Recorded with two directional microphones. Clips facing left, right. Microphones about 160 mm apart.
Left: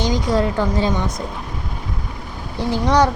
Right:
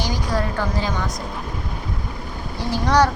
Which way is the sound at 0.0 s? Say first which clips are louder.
Left 5 dB; 20° left (ahead or behind).